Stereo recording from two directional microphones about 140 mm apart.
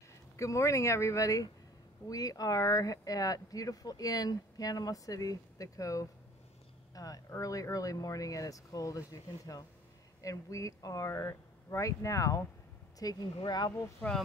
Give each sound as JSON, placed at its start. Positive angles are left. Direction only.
{"t": 0.4, "sound": "speech", "side_deg": 20}